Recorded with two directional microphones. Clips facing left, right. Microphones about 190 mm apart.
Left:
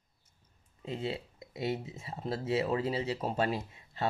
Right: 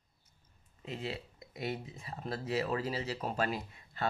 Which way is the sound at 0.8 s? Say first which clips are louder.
Left 4 dB; 25° left (ahead or behind).